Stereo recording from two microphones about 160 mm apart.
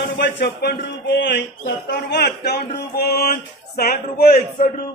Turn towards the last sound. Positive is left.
turn(degrees=70)  # may be behind; listen again after turning